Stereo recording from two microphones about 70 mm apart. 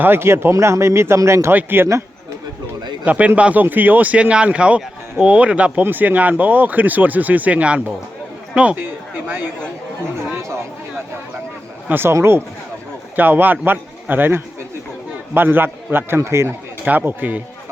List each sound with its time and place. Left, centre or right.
0.0 s speech: right
1.5 s speech: right
3.0 s speech: centre
8.8 s a sound: right
11.9 s speech: right
16.8 s speech: right